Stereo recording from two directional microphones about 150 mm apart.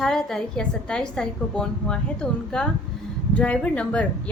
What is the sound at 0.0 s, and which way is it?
A woman's voice, 5° left (ahead or behind).